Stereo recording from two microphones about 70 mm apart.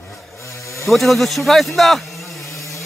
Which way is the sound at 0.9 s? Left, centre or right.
Centre.